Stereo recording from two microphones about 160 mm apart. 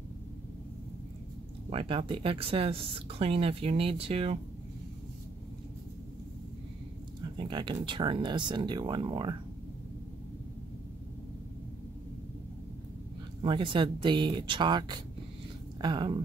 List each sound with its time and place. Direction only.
1.7 s speech: 35° right (ahead or behind)
7.3 s speech: 30° right (ahead or behind)
13.4 s speech: 30° right (ahead or behind)